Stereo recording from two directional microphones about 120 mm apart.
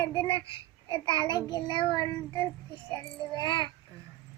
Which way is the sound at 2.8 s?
40° left (ahead or behind).